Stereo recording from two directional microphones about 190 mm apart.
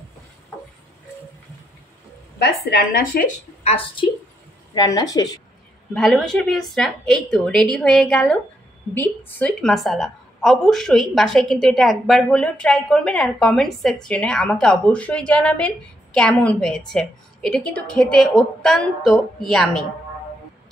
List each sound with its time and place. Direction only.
2.3 s speech: 55° left (ahead or behind)
3.6 s a woman's voice: 30° left (ahead or behind)
5.9 s a woman's voice: centre (ahead or behind)